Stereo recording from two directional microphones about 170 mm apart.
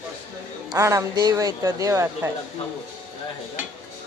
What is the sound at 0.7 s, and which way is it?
Speech, 20° right (ahead or behind).